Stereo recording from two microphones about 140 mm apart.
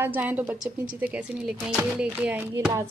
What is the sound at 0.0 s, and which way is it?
A woman's voice, 15° right (ahead or behind).